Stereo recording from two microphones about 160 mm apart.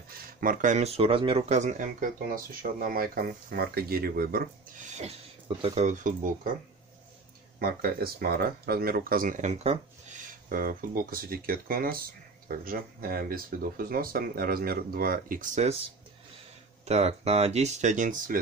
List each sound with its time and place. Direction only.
0.1 s speech: 60° right (ahead or behind); by 1.5 s 35° right (ahead or behind)
1.5 s speech: 50° right (ahead or behind); by 4.5 s 70° right (ahead or behind)
5.6 s speech: 45° right (ahead or behind)
7.5 s speech: 70° right (ahead or behind)
16.8 s speech: 40° right (ahead or behind)